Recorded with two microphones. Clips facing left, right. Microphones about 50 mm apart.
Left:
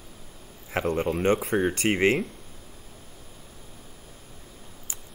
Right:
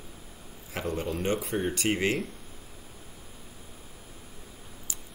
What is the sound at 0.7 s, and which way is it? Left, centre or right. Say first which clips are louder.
Speech: left 6 dB; left.